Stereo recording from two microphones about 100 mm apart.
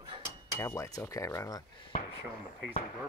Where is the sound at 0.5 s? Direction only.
30° left (ahead or behind).